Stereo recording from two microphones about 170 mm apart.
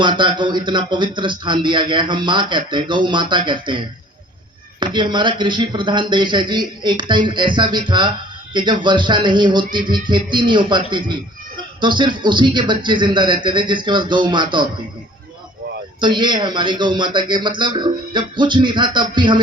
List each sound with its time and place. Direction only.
0.0 s speech: 25° right (ahead or behind)
16.0 s speech: 25° right (ahead or behind)